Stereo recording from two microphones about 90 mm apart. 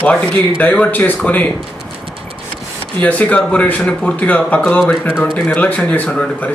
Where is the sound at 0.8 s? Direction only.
20° left (ahead or behind).